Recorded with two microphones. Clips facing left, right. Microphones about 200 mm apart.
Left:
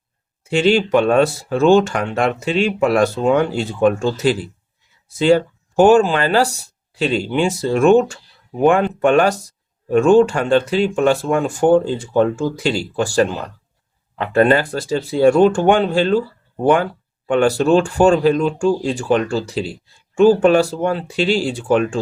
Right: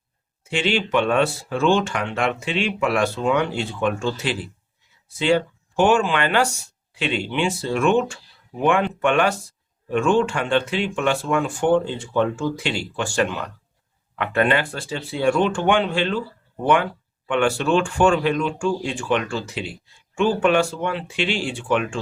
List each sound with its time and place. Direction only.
0.5 s speech: 40° left (ahead or behind)